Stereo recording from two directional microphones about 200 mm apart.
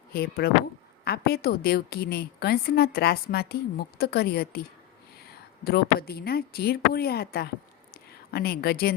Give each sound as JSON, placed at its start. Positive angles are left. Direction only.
{"t": 0.1, "sound": "a woman's voice", "side_deg": 50}
{"t": 5.6, "sound": "a woman's voice", "side_deg": 50}